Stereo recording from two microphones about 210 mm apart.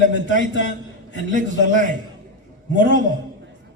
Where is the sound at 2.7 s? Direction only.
40° right (ahead or behind).